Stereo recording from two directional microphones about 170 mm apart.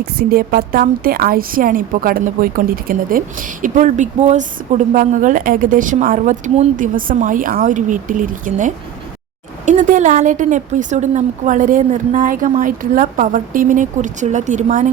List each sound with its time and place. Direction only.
0.0 s a woman's voice: 65° right (ahead or behind); by 14.8 s 45° right (ahead or behind)